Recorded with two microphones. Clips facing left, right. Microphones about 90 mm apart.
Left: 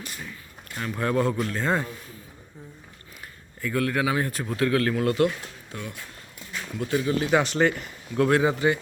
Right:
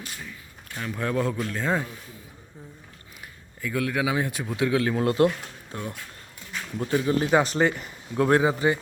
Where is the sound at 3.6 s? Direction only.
Centre (ahead or behind).